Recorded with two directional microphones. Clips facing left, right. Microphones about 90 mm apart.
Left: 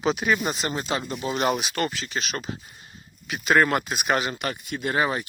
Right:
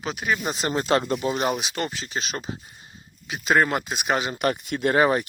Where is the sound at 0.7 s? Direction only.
50° right (ahead or behind).